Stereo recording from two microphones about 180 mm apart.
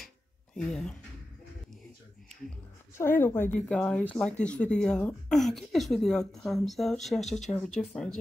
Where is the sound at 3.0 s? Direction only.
10° left (ahead or behind).